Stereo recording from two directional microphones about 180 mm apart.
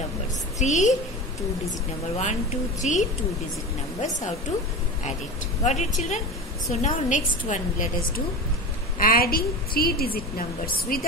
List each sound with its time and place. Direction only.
0.6 s a woman's voice: 40° left (ahead or behind)
5.6 s a woman's voice: 40° left (ahead or behind)
8.9 s a woman's voice: 55° left (ahead or behind)